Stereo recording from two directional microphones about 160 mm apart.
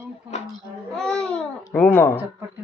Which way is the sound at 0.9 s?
5° left (ahead or behind).